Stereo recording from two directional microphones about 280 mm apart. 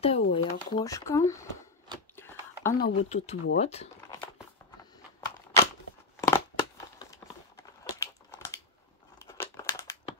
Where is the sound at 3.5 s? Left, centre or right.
Left.